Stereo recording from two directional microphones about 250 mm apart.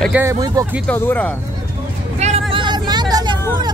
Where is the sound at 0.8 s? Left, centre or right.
Centre.